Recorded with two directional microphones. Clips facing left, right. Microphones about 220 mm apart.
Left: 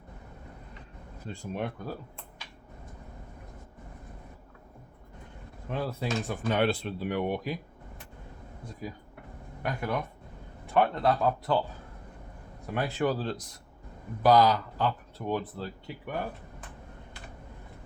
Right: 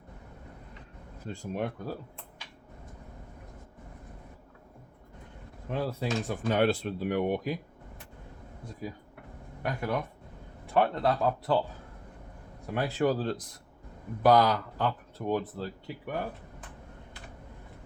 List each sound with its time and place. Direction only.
1.3 s speech: 40° right (ahead or behind)
5.6 s speech: 40° right (ahead or behind)
9.6 s speech: 35° right (ahead or behind)
12.7 s speech: 35° right (ahead or behind)